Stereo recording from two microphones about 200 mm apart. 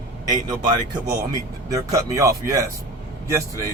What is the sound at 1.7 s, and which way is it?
Speech, 15° right (ahead or behind).